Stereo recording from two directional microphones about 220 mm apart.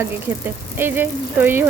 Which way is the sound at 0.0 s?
10° right (ahead or behind).